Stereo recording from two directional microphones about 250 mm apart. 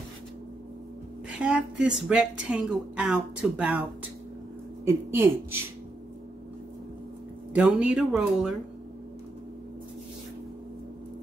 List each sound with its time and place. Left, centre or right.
1.4 s speech: centre
4.8 s speech: centre
7.5 s speech: centre